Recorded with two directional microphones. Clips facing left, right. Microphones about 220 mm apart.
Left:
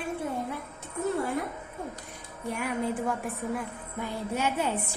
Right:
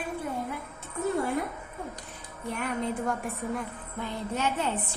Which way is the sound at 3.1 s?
5° left (ahead or behind).